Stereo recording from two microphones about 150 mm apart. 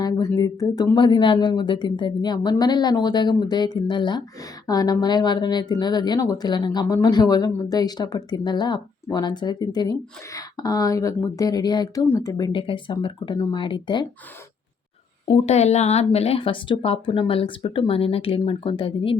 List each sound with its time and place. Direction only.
0.0 s a woman's voice: 25° left (ahead or behind)
15.4 s a woman's voice: 45° left (ahead or behind)